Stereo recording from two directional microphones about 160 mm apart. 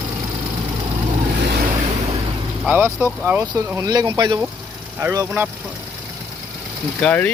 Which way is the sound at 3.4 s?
20° right (ahead or behind).